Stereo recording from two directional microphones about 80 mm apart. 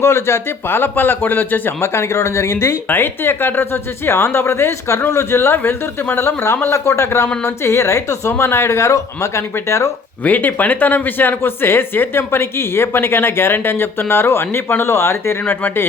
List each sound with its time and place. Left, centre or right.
0.0 s a man's voice: left
10.2 s speech: left